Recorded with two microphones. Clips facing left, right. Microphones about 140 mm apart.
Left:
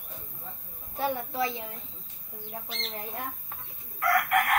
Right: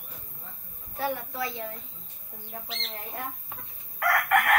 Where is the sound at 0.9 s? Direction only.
20° left (ahead or behind).